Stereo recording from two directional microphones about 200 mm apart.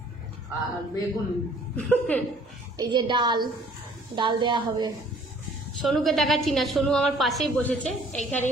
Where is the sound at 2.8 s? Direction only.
20° right (ahead or behind).